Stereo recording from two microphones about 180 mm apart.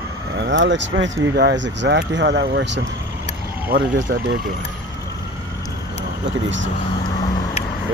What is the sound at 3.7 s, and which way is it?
Speech, 90° right.